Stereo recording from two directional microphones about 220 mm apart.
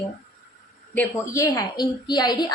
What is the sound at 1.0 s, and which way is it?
A woman's voice, 15° left (ahead or behind).